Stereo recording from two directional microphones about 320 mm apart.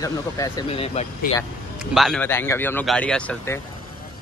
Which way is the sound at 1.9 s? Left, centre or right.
Centre.